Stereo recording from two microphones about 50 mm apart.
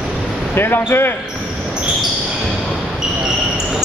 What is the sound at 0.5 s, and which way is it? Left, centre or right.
Speech, left.